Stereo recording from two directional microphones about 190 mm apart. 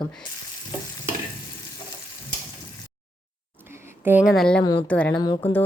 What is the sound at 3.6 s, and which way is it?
A woman's voice, 10° right (ahead or behind).